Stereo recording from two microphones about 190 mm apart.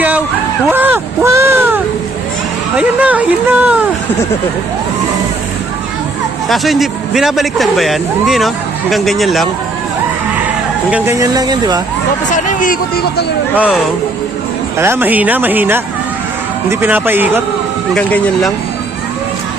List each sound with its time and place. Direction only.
0.7 s a sound: 10° right (ahead or behind)
2.7 s speech: 5° right (ahead or behind)
6.5 s speech: centre (ahead or behind)
10.9 s speech: 15° right (ahead or behind)
12.3 s speech: 40° left (ahead or behind)
14.8 s speech: 10° right (ahead or behind)
17.9 s speech: 5° left (ahead or behind)